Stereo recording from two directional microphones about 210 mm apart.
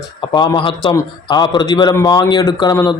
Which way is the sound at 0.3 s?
25° left (ahead or behind).